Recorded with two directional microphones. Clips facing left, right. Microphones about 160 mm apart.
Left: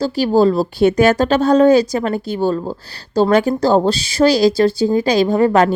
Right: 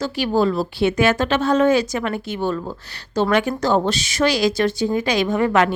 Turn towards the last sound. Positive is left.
turn(degrees=35)  # may be behind; listen again after turning